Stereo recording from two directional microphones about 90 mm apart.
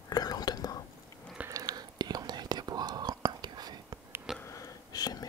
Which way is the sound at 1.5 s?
45° right (ahead or behind).